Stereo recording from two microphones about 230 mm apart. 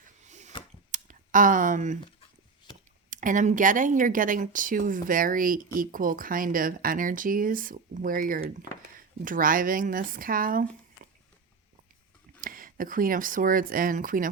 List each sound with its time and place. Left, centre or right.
0.3 s a sound: right
3.1 s speech: right
12.4 s speech: right